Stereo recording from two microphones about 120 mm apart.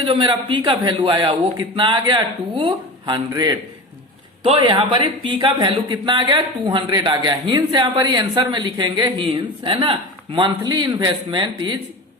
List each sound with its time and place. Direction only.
0.0 s speech: 40° right (ahead or behind)
4.5 s speech: 40° right (ahead or behind)